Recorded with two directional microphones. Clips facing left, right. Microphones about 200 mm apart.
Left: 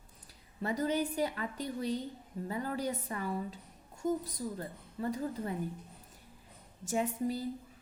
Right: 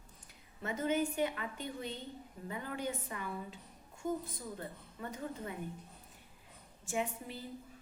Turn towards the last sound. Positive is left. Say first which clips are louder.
# left 6 dB
turn(degrees=40)  # may be behind; listen again after turning